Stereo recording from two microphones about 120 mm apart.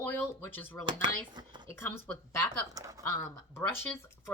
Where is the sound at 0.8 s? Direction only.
40° right (ahead or behind).